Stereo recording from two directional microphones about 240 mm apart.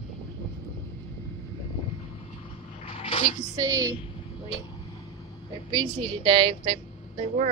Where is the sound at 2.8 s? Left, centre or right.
Left.